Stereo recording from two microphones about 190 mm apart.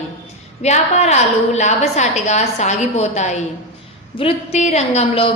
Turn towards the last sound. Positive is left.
turn(degrees=30)  # may be behind; listen again after turning